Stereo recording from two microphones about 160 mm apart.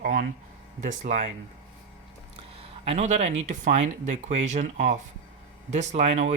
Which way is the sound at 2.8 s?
40° right (ahead or behind).